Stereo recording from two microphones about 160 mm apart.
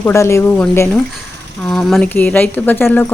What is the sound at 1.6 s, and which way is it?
Speech, centre (ahead or behind).